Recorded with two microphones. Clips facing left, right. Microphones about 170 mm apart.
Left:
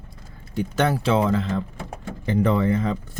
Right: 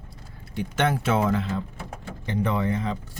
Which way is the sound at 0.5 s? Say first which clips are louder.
Left 3 dB; 40° left (ahead or behind).